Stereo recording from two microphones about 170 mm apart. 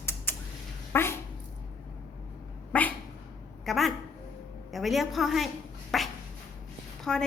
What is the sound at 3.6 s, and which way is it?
A woman's voice, centre (ahead or behind).